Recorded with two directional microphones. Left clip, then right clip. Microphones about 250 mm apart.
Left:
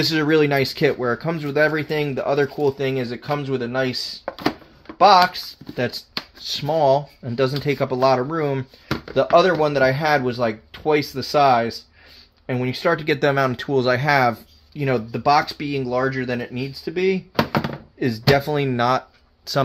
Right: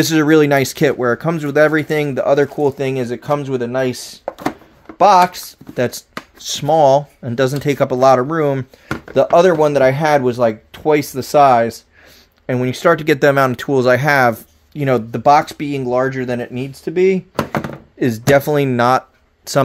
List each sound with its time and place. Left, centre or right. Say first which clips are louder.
0.0 s speech: right 6 dB; right
4.2 s a sound: right 4 dB; centre
4.9 s speech: right 3 dB; right